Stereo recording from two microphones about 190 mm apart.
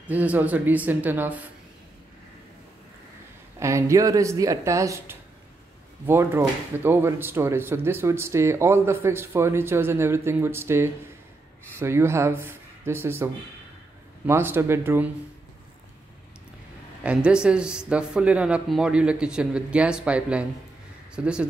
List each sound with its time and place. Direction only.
0.0 s speech: 10° right (ahead or behind)
3.5 s speech: 15° right (ahead or behind)
17.0 s speech: 5° right (ahead or behind)